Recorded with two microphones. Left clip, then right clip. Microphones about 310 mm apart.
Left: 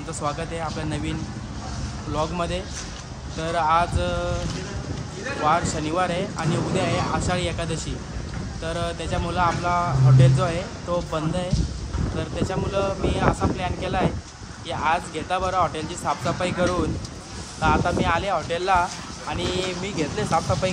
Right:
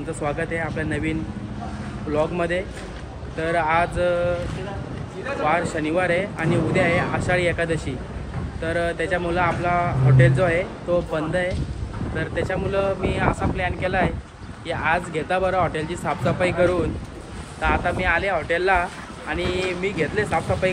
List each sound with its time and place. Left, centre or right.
0.2 s speech: centre
2.1 s speech: centre
5.4 s speech: centre